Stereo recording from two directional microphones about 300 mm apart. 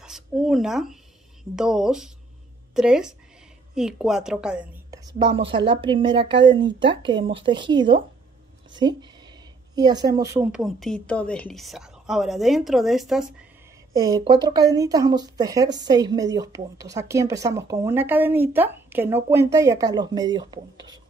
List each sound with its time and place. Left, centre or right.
0.0 s a woman's voice: centre
13.9 s speech: centre